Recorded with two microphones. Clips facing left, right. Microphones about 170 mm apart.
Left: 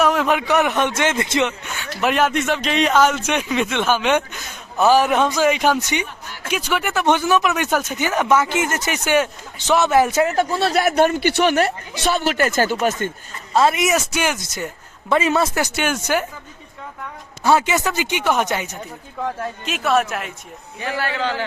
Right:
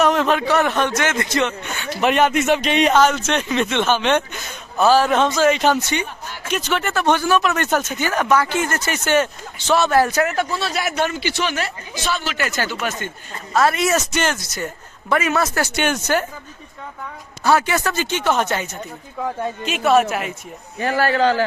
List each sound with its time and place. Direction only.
0.0 s speech: 5° left (ahead or behind)
1.8 s speech: centre (ahead or behind); by 10.3 s 25° left (ahead or behind)
10.3 s speech: 50° left (ahead or behind)
13.5 s speech: 20° left (ahead or behind)
15.1 s speech: 25° left (ahead or behind)
15.7 s speech: 5° left (ahead or behind)
17.4 s speech: 20° left (ahead or behind)
19.2 s speech: centre (ahead or behind)
20.7 s a man's voice: 45° right (ahead or behind)